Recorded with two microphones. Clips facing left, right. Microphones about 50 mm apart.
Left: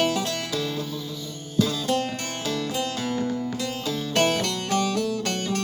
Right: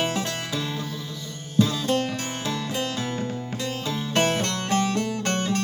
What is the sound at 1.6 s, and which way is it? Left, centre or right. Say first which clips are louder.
Music: right 1 dB; right.